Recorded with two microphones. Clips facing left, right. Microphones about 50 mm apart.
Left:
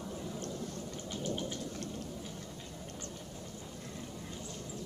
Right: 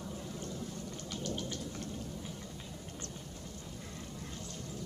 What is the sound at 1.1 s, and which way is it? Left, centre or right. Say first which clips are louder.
Rain: left 2 dB; centre.